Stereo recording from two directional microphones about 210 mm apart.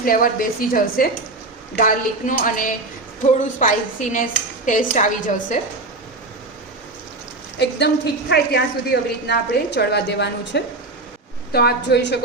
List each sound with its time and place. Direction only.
0.0 s a woman's voice: 40° left (ahead or behind)
7.6 s a woman's voice: 50° left (ahead or behind)